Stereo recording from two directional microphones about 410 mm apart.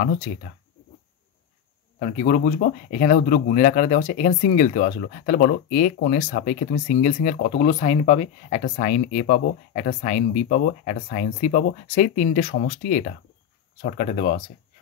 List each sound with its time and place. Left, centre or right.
0.3 s speech: left
2.0 s speech: centre